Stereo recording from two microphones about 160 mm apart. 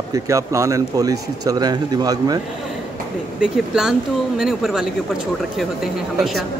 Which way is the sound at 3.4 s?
5° right (ahead or behind).